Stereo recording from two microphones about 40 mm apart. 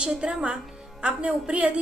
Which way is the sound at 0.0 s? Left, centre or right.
Right.